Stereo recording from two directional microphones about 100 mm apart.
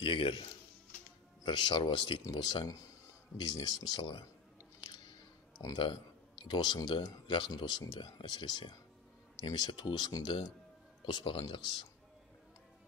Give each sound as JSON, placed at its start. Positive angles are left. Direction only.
{"t": 0.0, "sound": "speech", "side_deg": 60}
{"t": 1.4, "sound": "speech", "side_deg": 50}
{"t": 6.4, "sound": "speech", "side_deg": 45}